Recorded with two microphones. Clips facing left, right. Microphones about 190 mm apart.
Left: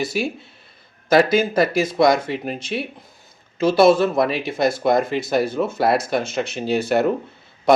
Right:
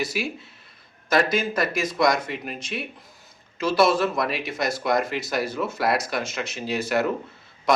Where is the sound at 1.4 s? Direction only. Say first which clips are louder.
Left 7 dB; 30° left (ahead or behind).